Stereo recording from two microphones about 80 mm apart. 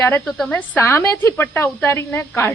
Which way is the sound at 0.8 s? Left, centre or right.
Left.